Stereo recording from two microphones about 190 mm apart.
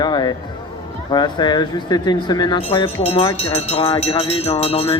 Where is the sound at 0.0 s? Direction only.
20° left (ahead or behind).